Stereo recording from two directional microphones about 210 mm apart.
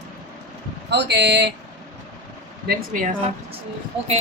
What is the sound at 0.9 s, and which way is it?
Speech, 55° right (ahead or behind).